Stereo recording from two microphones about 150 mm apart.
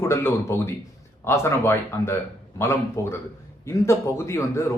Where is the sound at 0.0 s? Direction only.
20° left (ahead or behind).